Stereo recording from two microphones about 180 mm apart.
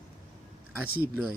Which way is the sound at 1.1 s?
5° right (ahead or behind).